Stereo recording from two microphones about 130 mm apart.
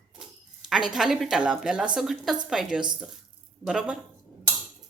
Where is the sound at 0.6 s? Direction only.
5° right (ahead or behind).